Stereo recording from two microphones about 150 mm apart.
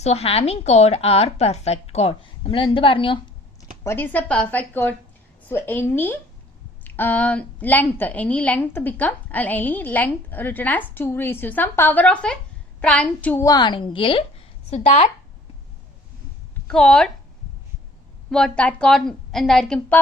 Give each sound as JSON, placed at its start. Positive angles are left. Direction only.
{"t": 0.0, "sound": "a woman's voice", "side_deg": 45}
{"t": 3.8, "sound": "a woman's voice", "side_deg": 15}
{"t": 13.4, "sound": "a woman's voice", "side_deg": 25}
{"t": 14.7, "sound": "a woman's voice", "side_deg": 50}
{"t": 16.6, "sound": "a woman's voice", "side_deg": 5}
{"t": 18.3, "sound": "a woman's voice", "side_deg": 5}